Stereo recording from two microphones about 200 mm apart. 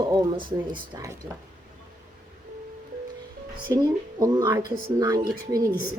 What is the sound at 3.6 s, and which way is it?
Speech, 20° right (ahead or behind).